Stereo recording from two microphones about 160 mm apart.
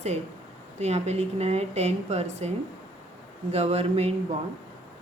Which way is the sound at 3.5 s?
40° right (ahead or behind).